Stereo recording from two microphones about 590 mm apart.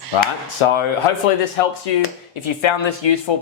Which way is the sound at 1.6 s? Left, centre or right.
Left.